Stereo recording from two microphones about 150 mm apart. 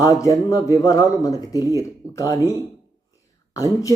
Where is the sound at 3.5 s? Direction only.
25° left (ahead or behind).